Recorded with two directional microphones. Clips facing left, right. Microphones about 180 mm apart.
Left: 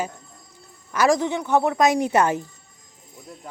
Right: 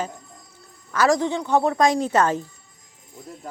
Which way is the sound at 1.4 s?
15° right (ahead or behind).